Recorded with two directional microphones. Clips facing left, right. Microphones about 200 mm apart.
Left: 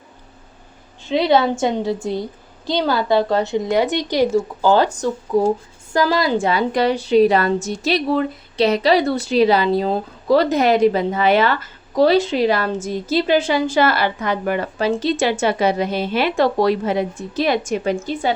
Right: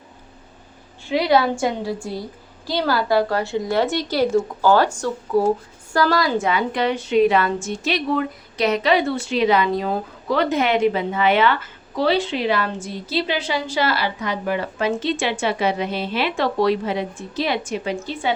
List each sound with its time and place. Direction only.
1.0 s a woman's voice: 25° left (ahead or behind); by 14.7 s 50° left (ahead or behind)
14.8 s a woman's voice: 35° left (ahead or behind)